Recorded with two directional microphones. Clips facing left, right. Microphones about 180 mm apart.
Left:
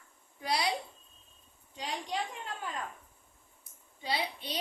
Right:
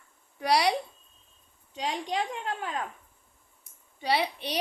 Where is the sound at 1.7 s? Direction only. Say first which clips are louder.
Right 6 dB; 85° right.